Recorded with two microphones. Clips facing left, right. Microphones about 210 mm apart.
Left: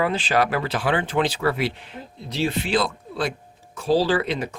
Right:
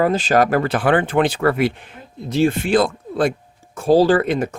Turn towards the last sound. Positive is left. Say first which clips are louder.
# right 6 dB
turn(degrees=-50)  # may be behind; listen again after turning